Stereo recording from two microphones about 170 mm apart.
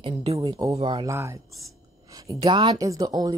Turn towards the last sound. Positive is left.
turn(degrees=-20)  # may be behind; listen again after turning